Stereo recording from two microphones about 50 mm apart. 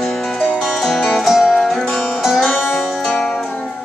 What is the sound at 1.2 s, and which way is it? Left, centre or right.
Music, centre.